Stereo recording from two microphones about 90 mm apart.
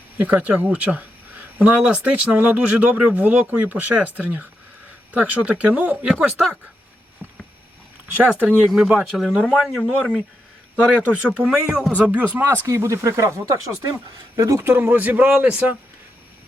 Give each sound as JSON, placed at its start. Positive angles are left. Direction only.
{"t": 0.2, "sound": "speech", "side_deg": -15}
{"t": 8.1, "sound": "speech", "side_deg": -15}
{"t": 11.2, "sound": "speech", "side_deg": -5}
{"t": 12.6, "sound": "speech", "side_deg": -30}